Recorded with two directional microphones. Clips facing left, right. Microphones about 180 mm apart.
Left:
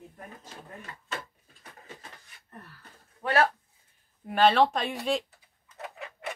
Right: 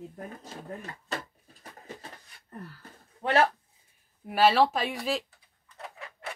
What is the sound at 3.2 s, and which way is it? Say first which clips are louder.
Speech: right 1 dB; 20° right (ahead or behind).